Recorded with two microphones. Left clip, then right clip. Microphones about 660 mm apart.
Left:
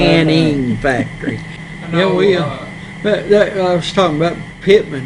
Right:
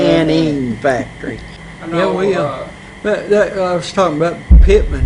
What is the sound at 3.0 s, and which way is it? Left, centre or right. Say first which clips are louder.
A man's voice: left 1 dB; left.